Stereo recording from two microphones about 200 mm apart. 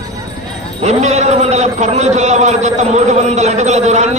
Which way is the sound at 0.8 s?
35° right (ahead or behind).